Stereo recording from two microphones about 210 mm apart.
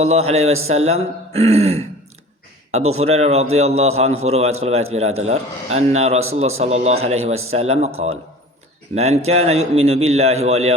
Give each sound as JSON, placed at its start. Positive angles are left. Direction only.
{"t": 0.0, "sound": "speech", "side_deg": -30}
{"t": 3.0, "sound": "a man's voice", "side_deg": -30}
{"t": 9.0, "sound": "a man's voice", "side_deg": -30}